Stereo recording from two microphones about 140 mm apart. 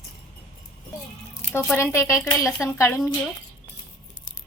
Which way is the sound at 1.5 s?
20° left (ahead or behind).